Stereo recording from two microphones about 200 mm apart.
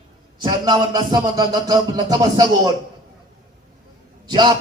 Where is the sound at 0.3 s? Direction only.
20° right (ahead or behind).